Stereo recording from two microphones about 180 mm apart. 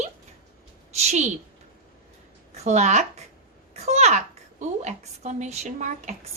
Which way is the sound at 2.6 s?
40° right (ahead or behind).